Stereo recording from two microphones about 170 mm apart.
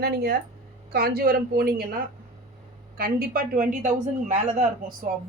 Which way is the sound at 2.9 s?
60° right (ahead or behind).